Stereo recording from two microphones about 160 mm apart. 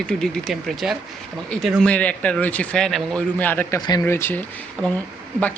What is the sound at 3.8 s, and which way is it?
Speech, 20° left (ahead or behind).